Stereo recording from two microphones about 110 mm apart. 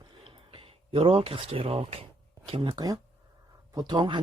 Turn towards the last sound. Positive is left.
turn(degrees=-50)  # may be behind; listen again after turning